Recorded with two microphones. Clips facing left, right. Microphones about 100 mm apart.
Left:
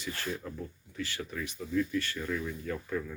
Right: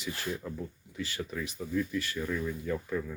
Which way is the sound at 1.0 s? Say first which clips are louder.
Right 1 dB; 20° right (ahead or behind).